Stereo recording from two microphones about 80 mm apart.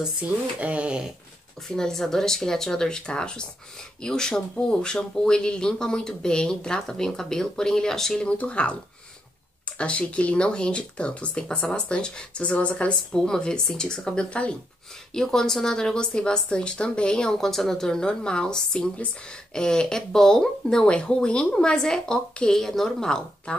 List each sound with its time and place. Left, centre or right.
0.2 s speech: centre
1.8 s speech: centre
8.3 s speech: centre
9.8 s speech: centre